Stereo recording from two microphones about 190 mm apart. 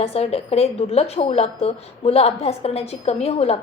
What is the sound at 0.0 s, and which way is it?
A woman's voice, 35° left (ahead or behind).